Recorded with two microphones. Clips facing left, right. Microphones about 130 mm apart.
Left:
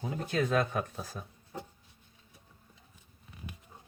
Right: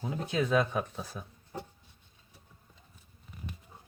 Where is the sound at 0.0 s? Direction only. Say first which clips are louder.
Even; 50° left (ahead or behind).